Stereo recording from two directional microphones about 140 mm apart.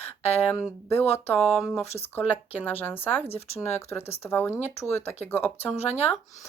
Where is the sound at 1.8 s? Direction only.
50° left (ahead or behind).